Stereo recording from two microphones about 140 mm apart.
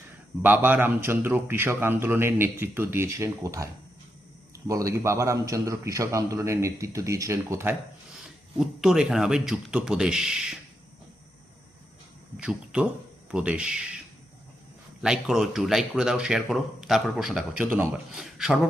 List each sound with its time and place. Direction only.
0.4 s a man's voice: 15° right (ahead or behind)
8.1 s speech: 5° right (ahead or behind)
12.4 s a man's voice: 5° right (ahead or behind)
15.0 s speech: 5° right (ahead or behind)